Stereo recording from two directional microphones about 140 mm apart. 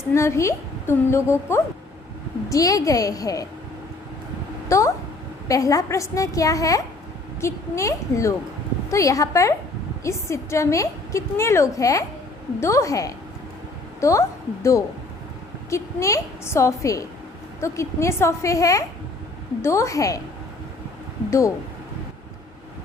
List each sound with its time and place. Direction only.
0.1 s a woman's voice: 20° left (ahead or behind)
4.7 s a woman's voice: 20° left (ahead or behind)
21.2 s speech: 20° left (ahead or behind)